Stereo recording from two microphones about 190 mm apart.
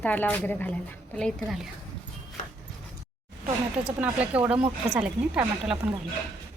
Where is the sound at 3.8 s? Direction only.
5° right (ahead or behind).